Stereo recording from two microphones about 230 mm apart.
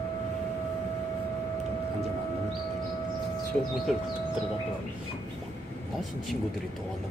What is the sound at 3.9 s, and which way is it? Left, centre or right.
Speech, centre.